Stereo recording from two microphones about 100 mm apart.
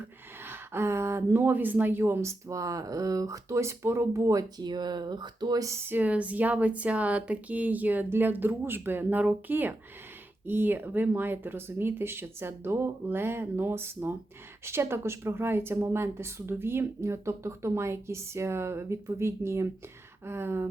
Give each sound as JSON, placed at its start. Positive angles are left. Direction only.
{"t": 0.4, "sound": "speech", "side_deg": -25}